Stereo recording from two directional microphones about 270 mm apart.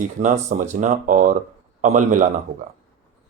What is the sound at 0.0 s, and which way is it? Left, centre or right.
Speech, right.